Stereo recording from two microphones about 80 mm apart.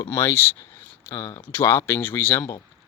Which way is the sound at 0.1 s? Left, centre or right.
Left.